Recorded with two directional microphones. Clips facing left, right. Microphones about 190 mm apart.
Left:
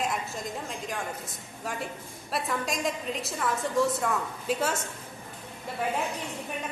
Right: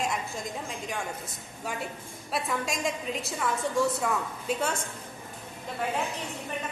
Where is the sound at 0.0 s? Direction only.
Centre (ahead or behind).